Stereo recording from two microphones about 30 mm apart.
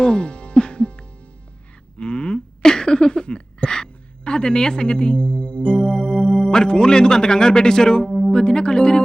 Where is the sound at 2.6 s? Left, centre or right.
Left.